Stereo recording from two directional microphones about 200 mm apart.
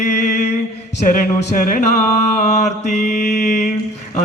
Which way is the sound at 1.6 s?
40° left (ahead or behind).